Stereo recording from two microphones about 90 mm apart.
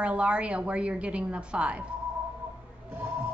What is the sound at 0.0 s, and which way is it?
A woman's voice, 10° right (ahead or behind).